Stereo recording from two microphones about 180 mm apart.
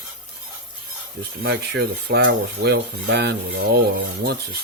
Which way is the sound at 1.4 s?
65° right (ahead or behind).